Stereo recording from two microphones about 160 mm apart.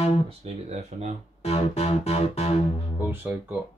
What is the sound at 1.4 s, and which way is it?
Music, 40° left (ahead or behind).